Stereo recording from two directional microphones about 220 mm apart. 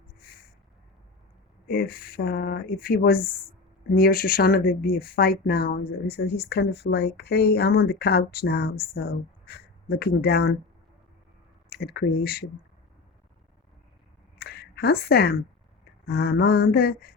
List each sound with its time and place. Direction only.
1.6 s speech: 45° left (ahead or behind)
11.7 s speech: 45° left (ahead or behind)
14.3 s a sound: 45° left (ahead or behind)
16.0 s speech: 45° left (ahead or behind)